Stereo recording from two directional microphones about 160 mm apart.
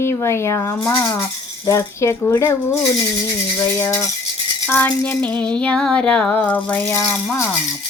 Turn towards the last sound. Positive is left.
turn(degrees=10)  # may be behind; listen again after turning